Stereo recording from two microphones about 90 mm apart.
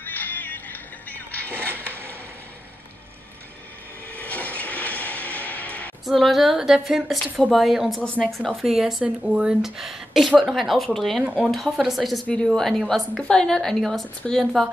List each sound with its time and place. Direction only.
0.0 s music: 20° left (ahead or behind)
4.1 s a sound: 15° left (ahead or behind)
6.0 s speech: centre (ahead or behind)
8.0 s speech: 10° left (ahead or behind)
8.4 s speech: centre (ahead or behind)